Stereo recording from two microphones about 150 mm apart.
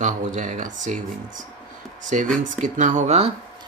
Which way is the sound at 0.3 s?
55° right (ahead or behind).